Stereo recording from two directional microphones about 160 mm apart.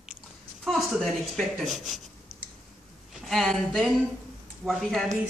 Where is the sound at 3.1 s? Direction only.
Centre (ahead or behind).